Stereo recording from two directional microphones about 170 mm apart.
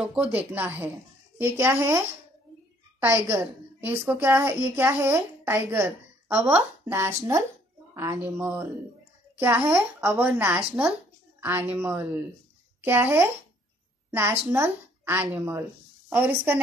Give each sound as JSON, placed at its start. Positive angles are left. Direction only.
{"t": 0.0, "sound": "a woman's voice", "side_deg": -5}